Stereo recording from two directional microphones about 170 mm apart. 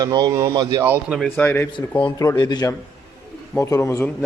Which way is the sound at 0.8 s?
10° right (ahead or behind).